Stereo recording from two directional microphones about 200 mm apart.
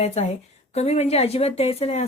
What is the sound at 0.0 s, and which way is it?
A woman's voice, 30° left (ahead or behind).